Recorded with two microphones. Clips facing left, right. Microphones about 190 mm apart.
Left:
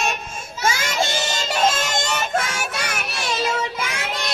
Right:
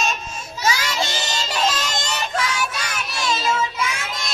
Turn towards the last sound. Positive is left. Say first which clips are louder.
# even
turn(degrees=60)  # may be behind; listen again after turning